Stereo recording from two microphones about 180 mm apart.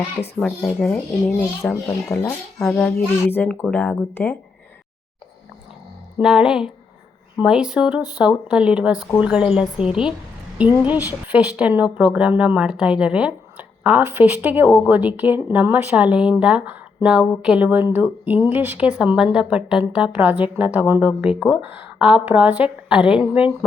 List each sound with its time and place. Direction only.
0.3 s speech: 5° left (ahead or behind)
2.6 s a woman's voice: 5° left (ahead or behind)
6.1 s a woman's voice: 5° right (ahead or behind)